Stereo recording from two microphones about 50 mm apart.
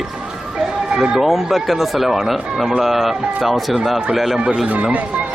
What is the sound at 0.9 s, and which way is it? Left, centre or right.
Speech, centre.